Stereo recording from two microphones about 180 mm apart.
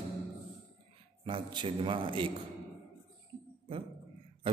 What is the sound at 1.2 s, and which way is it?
A man's voice, 25° right (ahead or behind).